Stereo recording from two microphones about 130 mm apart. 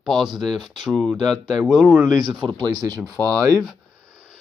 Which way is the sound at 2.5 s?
30° right (ahead or behind).